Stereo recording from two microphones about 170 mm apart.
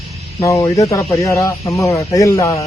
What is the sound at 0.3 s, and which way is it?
Speech, 20° left (ahead or behind).